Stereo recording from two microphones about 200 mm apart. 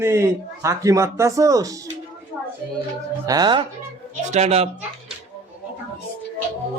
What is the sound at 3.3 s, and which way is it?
Speech, 20° right (ahead or behind).